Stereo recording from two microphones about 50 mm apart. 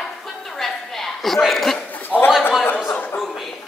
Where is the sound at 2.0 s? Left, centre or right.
Left.